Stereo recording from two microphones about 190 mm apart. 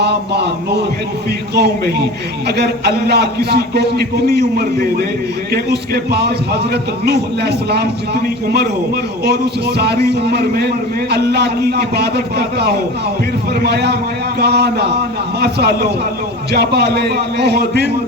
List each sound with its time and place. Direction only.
0.0 s a man's voice: 60° right (ahead or behind)